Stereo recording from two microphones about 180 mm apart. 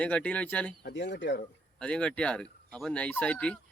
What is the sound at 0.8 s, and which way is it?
Speech, 70° left (ahead or behind).